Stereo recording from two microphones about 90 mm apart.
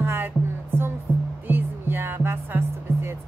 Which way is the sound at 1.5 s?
25° right (ahead or behind).